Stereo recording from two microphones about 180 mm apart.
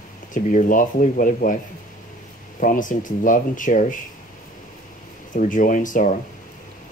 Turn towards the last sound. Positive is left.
turn(degrees=45)  # may be behind; listen again after turning